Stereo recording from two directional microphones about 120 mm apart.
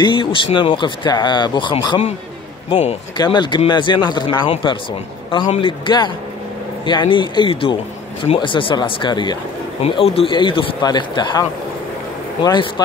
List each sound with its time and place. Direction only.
0.0 s speech: 45° left (ahead or behind)
2.7 s speech: 60° left (ahead or behind)
3.2 s speech: 40° left (ahead or behind)
5.6 s speech: 45° left (ahead or behind)
9.8 s speech: 55° left (ahead or behind); by 11.4 s 40° left (ahead or behind)
12.4 s speech: 35° left (ahead or behind)